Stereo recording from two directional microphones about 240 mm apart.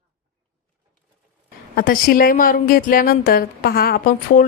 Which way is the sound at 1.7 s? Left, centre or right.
Left.